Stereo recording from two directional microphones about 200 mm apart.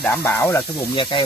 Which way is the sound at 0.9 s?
25° left (ahead or behind).